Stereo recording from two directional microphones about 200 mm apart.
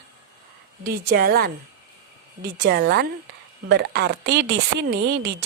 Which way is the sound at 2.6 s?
55° right (ahead or behind).